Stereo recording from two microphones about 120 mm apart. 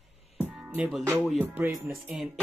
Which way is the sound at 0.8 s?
Centre (ahead or behind).